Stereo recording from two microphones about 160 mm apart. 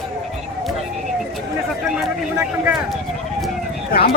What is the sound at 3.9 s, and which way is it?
Speech, 70° left (ahead or behind).